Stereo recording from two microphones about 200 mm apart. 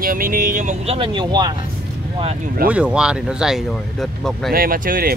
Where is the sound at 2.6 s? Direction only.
5° right (ahead or behind).